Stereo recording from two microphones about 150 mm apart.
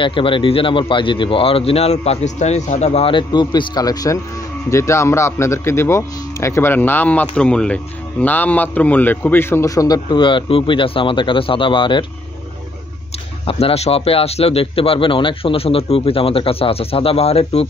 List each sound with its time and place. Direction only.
0.0 s a man's voice: 35° left (ahead or behind)
13.5 s a man's voice: 40° left (ahead or behind)